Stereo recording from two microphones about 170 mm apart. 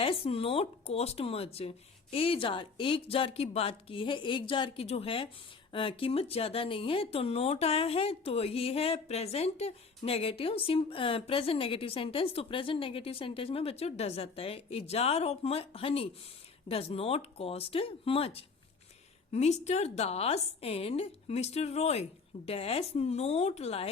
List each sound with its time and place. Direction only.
0.0 s speech: 35° left (ahead or behind)